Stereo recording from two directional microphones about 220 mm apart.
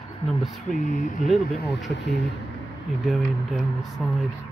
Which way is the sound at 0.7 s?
35° left (ahead or behind).